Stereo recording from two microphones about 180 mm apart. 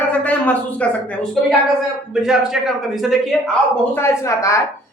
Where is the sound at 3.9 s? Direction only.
15° left (ahead or behind).